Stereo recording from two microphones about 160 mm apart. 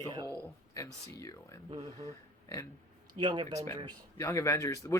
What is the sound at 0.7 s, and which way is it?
Speech, 20° left (ahead or behind).